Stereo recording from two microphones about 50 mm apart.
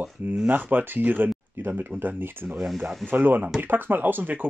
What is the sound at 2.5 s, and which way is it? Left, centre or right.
Speech, centre.